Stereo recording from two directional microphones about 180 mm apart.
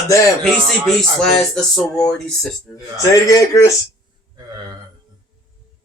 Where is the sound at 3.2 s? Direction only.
20° left (ahead or behind).